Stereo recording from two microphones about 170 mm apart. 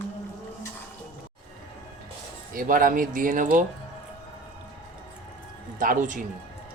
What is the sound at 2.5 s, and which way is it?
Speech, 55° right (ahead or behind).